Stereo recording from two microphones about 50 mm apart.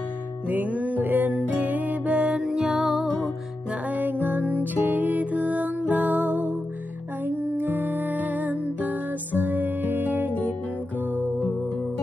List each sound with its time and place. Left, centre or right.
0.5 s music: right
2.4 s music: centre
3.9 s music: right
11.1 s music: left